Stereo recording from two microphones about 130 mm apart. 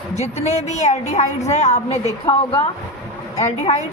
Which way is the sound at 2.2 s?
40° left (ahead or behind).